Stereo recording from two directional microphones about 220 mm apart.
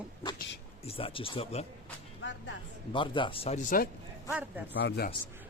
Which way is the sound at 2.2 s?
55° left (ahead or behind).